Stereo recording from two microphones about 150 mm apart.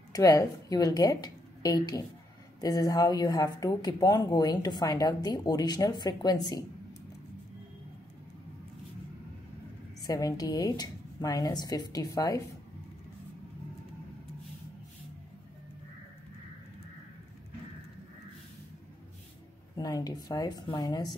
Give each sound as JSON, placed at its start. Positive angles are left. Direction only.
{"t": 0.1, "sound": "a woman's voice", "side_deg": 25}
{"t": 10.0, "sound": "speech", "side_deg": 25}
{"t": 19.7, "sound": "speech", "side_deg": 25}